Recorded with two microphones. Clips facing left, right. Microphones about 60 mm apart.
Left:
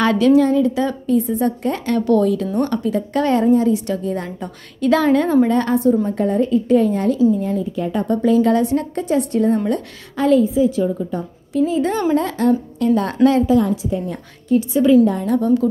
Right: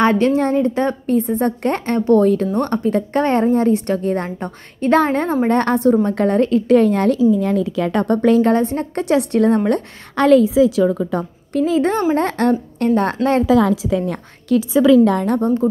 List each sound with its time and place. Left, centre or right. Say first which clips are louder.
0.0 s speech: right 2 dB; right
0.4 s a woman's voice: left 1 dB; right
1.9 s speech: right 2 dB; right
2.2 s a woman's voice: right 2 dB; right
5.5 s a woman's voice: right 1 dB; right
8.5 s speech: even; right
8.9 s a woman's voice: right 2 dB; right
13.7 s a woman's voice: right 3 dB; right
15.0 s a woman's voice: right 2 dB; right
15.4 s speech: left 2 dB; right